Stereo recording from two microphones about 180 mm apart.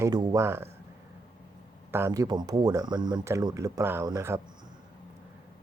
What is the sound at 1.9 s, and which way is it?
Speech, 15° right (ahead or behind).